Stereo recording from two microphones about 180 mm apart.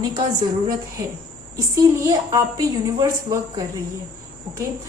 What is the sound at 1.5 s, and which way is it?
A woman's voice, 15° right (ahead or behind).